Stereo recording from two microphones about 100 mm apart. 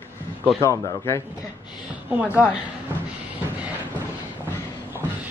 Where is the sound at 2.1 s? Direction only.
15° right (ahead or behind).